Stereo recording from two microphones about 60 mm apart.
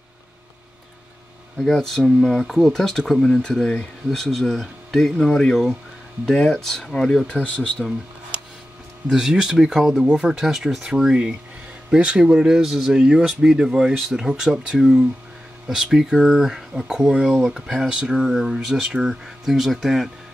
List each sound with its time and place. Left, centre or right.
1.6 s speech: centre
7.4 s speech: left
9.1 s speech: centre
17.2 s speech: centre